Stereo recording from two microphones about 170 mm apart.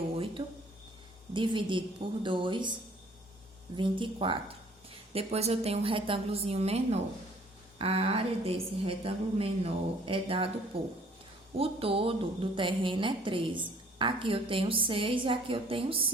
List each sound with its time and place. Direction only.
0.4 s speech: 30° right (ahead or behind)
3.8 s a woman's voice: 30° right (ahead or behind)